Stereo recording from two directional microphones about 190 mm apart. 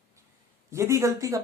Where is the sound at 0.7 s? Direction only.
15° right (ahead or behind).